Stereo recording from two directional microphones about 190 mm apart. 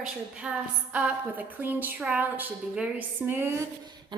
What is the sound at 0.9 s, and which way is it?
A woman's voice, 10° right (ahead or behind).